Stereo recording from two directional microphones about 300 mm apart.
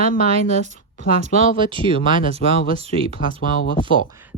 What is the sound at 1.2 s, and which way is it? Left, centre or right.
Speech, centre.